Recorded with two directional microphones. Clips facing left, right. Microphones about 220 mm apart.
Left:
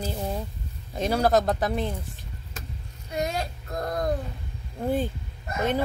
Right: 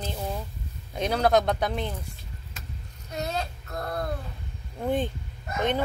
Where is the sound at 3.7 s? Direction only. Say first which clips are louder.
Left 3 dB; 40° left (ahead or behind).